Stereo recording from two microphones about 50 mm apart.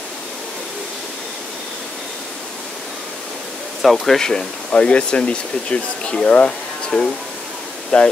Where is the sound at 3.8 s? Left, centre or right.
Centre.